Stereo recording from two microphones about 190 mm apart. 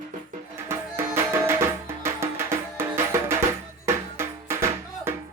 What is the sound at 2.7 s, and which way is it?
Music, 15° right (ahead or behind).